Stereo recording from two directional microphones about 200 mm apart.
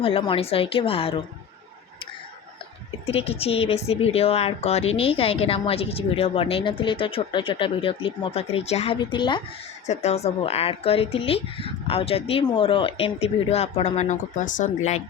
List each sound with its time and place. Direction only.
0.0 s speech: 25° left (ahead or behind)
3.1 s speech: 30° left (ahead or behind)
9.8 s speech: 35° left (ahead or behind)